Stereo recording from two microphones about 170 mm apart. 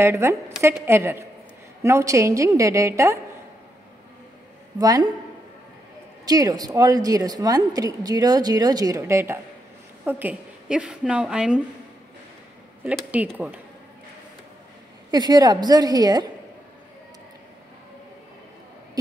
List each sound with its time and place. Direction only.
0.0 s a woman's voice: 15° right (ahead or behind)
4.7 s a woman's voice: 20° right (ahead or behind)
6.2 s a woman's voice: 20° right (ahead or behind); by 11.6 s 5° right (ahead or behind)
13.3 s a woman's voice: 5° right (ahead or behind)
15.0 s a woman's voice: 25° right (ahead or behind)